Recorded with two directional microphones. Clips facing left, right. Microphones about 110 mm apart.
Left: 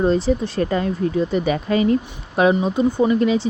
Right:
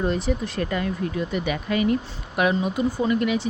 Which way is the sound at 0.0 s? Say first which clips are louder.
Left 6 dB; 30° left (ahead or behind).